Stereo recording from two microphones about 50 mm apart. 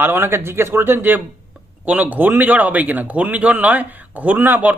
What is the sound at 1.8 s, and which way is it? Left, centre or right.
A man's voice, right.